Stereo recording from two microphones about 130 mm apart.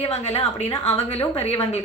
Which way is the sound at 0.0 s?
55° left (ahead or behind).